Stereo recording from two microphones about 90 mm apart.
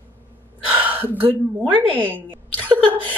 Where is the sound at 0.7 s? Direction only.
20° right (ahead or behind).